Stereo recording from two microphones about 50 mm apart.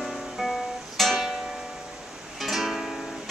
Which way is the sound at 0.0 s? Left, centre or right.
Centre.